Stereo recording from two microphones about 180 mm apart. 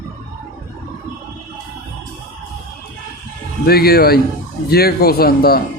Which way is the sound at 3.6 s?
60° left (ahead or behind).